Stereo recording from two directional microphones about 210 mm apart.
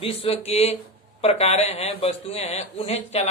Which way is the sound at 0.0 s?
25° left (ahead or behind).